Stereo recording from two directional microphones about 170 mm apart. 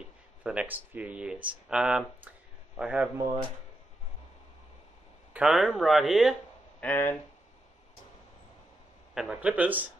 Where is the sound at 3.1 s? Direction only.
25° right (ahead or behind).